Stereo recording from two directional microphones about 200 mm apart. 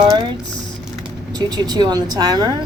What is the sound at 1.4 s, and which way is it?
Speech, 20° right (ahead or behind).